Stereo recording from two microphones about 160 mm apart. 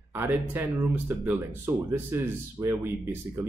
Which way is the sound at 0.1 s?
15° right (ahead or behind).